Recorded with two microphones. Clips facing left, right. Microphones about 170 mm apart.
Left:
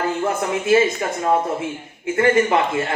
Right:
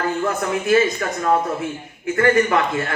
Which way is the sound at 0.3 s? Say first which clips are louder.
Left 2 dB; 25° left (ahead or behind).